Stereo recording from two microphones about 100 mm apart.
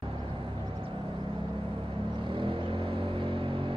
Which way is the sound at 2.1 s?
55° right (ahead or behind).